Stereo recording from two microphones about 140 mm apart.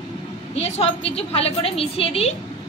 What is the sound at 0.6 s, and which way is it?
A woman's voice, 45° left (ahead or behind).